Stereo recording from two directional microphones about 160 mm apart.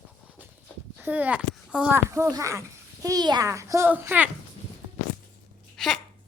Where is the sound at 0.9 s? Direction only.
10° right (ahead or behind).